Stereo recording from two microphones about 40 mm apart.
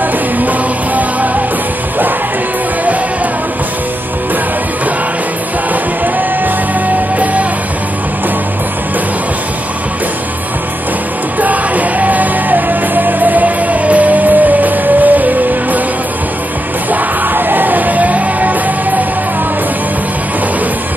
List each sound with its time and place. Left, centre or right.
0.4 s music: right
11.3 s music: right
16.9 s music: right